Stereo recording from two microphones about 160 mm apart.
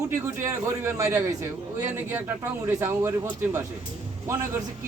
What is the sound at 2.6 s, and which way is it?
A man's voice, 15° right (ahead or behind).